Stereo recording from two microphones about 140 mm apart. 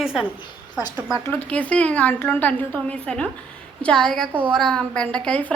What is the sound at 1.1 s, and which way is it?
A woman's voice, 15° left (ahead or behind).